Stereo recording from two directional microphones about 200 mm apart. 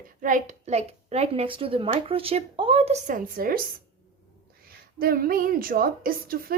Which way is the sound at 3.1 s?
45° right (ahead or behind).